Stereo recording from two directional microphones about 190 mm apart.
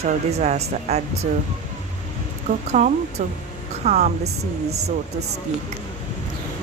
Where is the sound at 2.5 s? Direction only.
40° right (ahead or behind).